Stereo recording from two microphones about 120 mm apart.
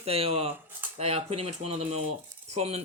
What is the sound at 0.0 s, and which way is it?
Speech, 55° right (ahead or behind).